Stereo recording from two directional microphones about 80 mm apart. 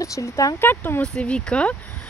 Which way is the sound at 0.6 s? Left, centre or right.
Left.